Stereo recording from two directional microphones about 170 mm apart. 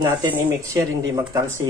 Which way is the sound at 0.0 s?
25° right (ahead or behind).